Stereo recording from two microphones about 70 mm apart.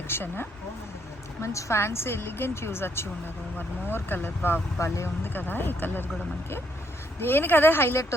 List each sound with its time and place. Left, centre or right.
0.1 s a woman's voice: left
1.4 s a woman's voice: left
4.8 s speech: left
5.2 s speech: left
7.2 s a woman's voice: left